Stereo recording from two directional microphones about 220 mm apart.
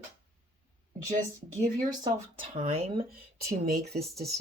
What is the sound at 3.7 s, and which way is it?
Speech, 45° right (ahead or behind).